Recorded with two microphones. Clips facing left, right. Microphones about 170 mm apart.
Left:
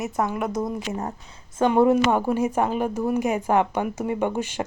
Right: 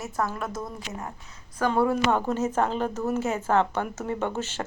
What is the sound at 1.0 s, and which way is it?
Speech, 35° left (ahead or behind).